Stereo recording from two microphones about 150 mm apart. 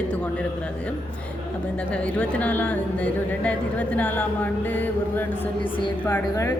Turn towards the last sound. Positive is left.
turn(degrees=15)  # may be behind; listen again after turning